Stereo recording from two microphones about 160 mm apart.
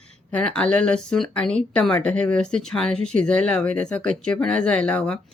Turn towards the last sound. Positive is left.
turn(degrees=5)  # may be behind; listen again after turning